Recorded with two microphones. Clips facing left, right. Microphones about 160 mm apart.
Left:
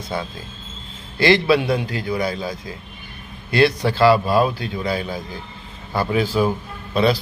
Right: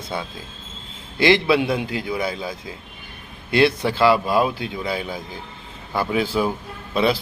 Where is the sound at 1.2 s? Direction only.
20° right (ahead or behind).